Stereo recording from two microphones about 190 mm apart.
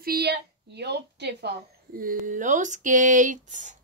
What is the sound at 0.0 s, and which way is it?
A woman's voice, 55° right (ahead or behind).